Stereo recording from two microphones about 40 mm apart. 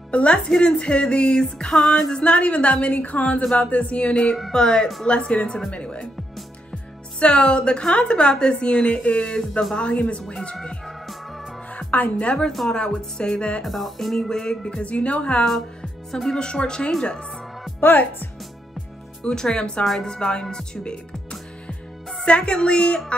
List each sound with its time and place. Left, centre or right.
0.1 s a woman's voice: left
2.2 s a woman's voice: left
2.9 s a woman's voice: left
7.2 s a woman's voice: left
10.5 s a woman's voice: centre
11.9 s a woman's voice: left
12.3 s a woman's voice: left
13.7 s music: centre
14.1 s music: centre
14.8 s a woman's voice: left
17.7 s a woman's voice: left
19.2 s a woman's voice: centre
20.5 s music: left
22.2 s a woman's voice: left